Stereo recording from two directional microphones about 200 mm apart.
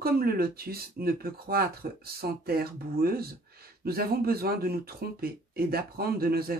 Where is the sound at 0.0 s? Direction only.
50° right (ahead or behind).